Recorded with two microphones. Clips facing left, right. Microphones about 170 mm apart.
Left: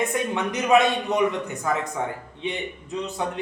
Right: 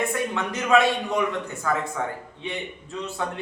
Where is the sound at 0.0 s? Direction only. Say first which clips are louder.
Left 1 dB; 20° left (ahead or behind).